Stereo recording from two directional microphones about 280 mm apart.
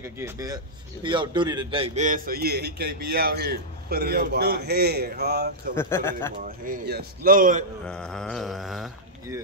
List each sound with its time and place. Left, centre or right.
0.0 s a man's voice: centre; by 5.8 s right
5.8 s speech: centre
6.4 s a man's voice: right
7.8 s speech: centre